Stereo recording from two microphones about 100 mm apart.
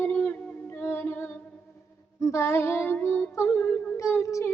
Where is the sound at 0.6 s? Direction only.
25° left (ahead or behind).